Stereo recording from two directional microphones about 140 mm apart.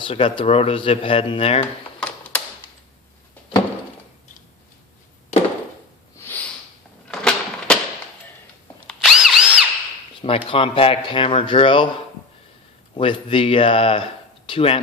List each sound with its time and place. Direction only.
0.0 s speech: 40° left (ahead or behind)
2.0 s typewriter: 10° left (ahead or behind)
6.1 s a sound: 15° left (ahead or behind)
8.9 s drill: centre (ahead or behind)
10.2 s speech: 40° left (ahead or behind)
12.9 s speech: 40° left (ahead or behind)